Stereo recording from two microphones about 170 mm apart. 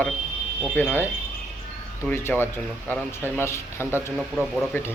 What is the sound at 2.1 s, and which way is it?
Speech, 15° left (ahead or behind).